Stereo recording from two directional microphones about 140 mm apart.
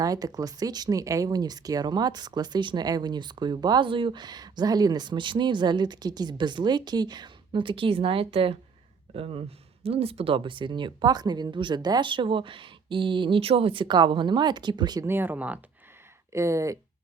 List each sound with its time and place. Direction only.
0.0 s speech: 25° right (ahead or behind)
15.0 s speech: 15° right (ahead or behind)
16.3 s speech: 20° right (ahead or behind)